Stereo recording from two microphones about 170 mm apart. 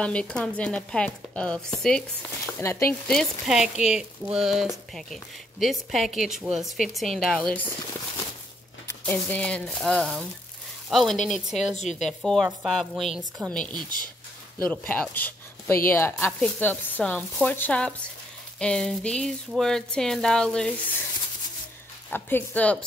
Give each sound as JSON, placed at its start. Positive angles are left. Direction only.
{"t": 0.0, "sound": "speech", "side_deg": 5}
{"t": 2.6, "sound": "speech", "side_deg": 15}
{"t": 8.8, "sound": "speech", "side_deg": 10}
{"t": 11.7, "sound": "a woman's voice", "side_deg": 45}
{"t": 12.1, "sound": "speech", "side_deg": 0}
{"t": 22.1, "sound": "speech", "side_deg": 10}